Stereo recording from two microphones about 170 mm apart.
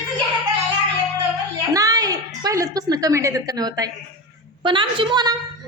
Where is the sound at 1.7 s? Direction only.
20° right (ahead or behind).